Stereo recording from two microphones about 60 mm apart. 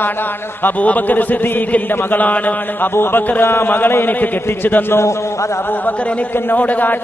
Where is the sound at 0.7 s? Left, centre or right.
Left.